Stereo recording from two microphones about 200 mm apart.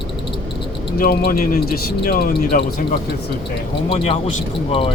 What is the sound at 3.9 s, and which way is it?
Speech, 30° left (ahead or behind).